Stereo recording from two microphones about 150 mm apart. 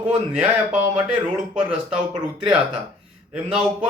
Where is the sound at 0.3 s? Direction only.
5° right (ahead or behind).